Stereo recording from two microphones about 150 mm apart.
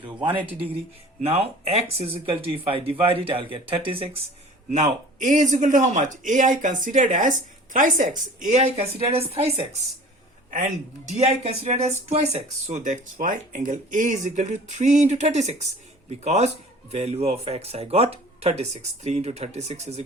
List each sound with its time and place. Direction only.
0.2 s speech: 10° right (ahead or behind)
1.2 s speech: 45° right (ahead or behind)
4.7 s a man's voice: 55° right (ahead or behind)
10.5 s speech: 55° right (ahead or behind)